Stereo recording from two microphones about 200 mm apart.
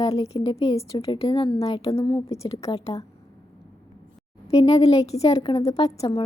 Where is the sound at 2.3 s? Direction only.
25° left (ahead or behind).